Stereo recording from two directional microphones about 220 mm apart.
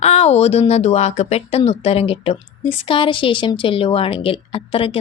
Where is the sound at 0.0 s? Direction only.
30° left (ahead or behind).